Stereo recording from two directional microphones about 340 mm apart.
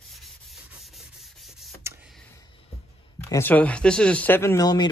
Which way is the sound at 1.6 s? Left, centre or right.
Centre.